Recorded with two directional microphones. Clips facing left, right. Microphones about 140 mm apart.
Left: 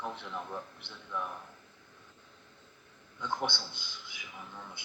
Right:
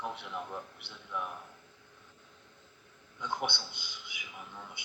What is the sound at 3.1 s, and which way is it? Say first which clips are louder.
Speech: left 1 dB; 15° right (ahead or behind).